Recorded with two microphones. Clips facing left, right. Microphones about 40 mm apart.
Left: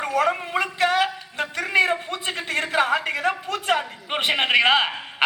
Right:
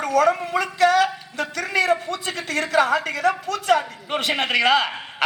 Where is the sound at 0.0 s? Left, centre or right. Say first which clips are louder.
Right 3 dB; left.